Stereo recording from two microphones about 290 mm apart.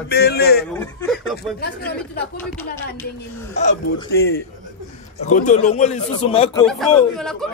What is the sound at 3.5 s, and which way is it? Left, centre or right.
A man's voice, left.